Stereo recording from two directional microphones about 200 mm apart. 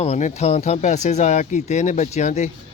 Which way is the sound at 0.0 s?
35° left (ahead or behind).